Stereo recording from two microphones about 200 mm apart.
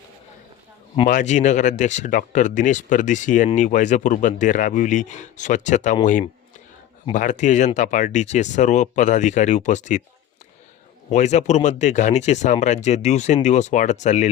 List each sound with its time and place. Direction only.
1.0 s speech: 40° left (ahead or behind)
7.1 s speech: 40° left (ahead or behind)
11.1 s speech: 35° left (ahead or behind)